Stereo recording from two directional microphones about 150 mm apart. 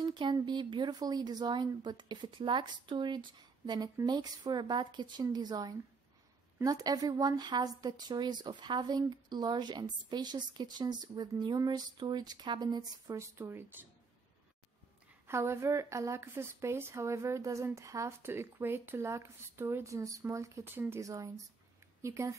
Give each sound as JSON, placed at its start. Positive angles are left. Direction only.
{"t": 0.0, "sound": "a woman's voice", "side_deg": -30}
{"t": 15.2, "sound": "a woman's voice", "side_deg": -15}